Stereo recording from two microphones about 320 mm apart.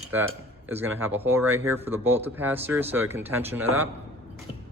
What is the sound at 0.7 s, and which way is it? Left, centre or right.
Speech, centre.